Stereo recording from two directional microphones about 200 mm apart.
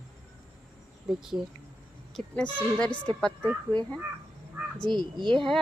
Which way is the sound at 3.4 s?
20° right (ahead or behind).